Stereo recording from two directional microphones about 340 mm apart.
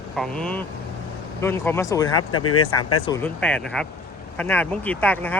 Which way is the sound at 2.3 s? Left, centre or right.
Left.